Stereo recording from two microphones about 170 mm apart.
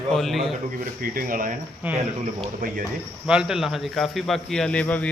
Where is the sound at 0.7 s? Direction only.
55° right (ahead or behind).